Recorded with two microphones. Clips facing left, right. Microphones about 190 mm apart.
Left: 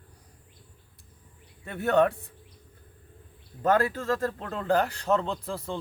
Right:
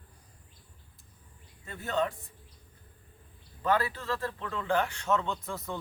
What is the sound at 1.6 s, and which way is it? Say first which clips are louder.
Speech: left 8 dB; 65° left (ahead or behind).